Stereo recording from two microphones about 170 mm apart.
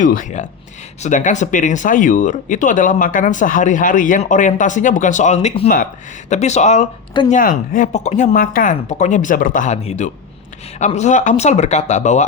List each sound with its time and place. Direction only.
0.0 s speech: 50° left (ahead or behind)
7.3 s speech: 55° left (ahead or behind)